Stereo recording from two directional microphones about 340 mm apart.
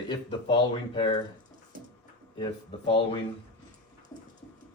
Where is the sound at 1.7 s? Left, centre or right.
Right.